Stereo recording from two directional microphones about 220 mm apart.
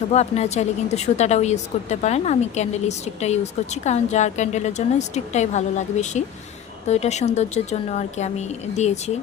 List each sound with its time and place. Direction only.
0.1 s a woman's voice: 30° left (ahead or behind)